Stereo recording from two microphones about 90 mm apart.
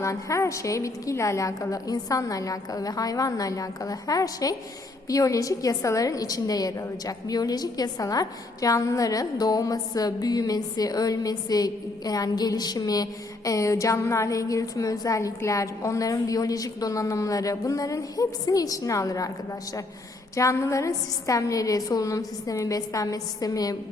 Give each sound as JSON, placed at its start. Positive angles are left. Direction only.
{"t": 0.0, "sound": "a woman's voice", "side_deg": 35}
{"t": 20.3, "sound": "a woman's voice", "side_deg": 35}